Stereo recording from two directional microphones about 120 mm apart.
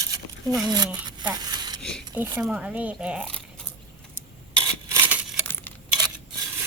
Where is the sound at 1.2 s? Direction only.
35° right (ahead or behind).